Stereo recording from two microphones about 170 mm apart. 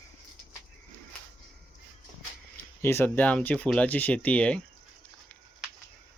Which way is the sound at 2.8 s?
15° left (ahead or behind).